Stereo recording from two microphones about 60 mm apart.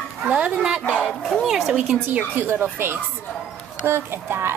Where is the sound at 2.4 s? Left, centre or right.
Right.